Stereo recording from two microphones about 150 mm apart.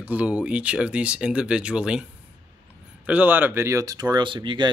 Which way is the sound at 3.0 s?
10° right (ahead or behind).